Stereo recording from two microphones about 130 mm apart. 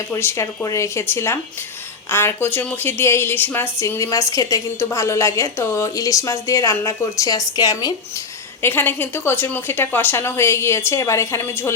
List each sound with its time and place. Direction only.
0.1 s a woman's voice: 20° left (ahead or behind)
8.6 s speech: 15° left (ahead or behind)